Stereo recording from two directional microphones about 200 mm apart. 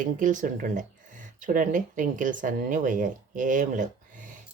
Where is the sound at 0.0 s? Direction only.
40° right (ahead or behind).